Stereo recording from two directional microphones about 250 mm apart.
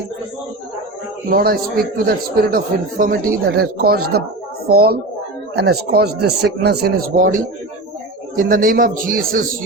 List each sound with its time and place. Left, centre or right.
1.3 s a man's voice: right